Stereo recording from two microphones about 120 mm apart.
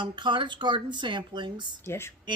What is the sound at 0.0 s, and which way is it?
Speech, 40° right (ahead or behind).